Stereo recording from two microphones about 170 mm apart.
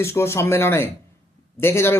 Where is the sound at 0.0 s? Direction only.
15° left (ahead or behind).